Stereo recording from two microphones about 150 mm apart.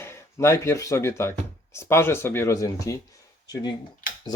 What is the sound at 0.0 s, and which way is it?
Speech, 20° left (ahead or behind).